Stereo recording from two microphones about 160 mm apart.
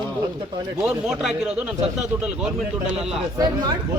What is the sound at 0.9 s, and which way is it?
Speech, 5° right (ahead or behind).